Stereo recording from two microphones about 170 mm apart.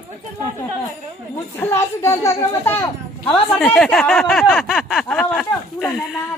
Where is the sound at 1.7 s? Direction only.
20° left (ahead or behind).